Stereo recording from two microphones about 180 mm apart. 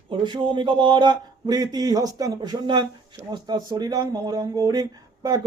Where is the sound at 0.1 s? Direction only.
25° right (ahead or behind).